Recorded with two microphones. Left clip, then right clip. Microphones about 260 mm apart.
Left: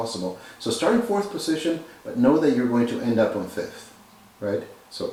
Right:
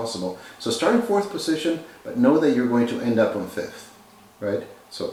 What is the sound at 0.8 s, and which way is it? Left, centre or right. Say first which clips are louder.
Speech: right 2 dB; centre.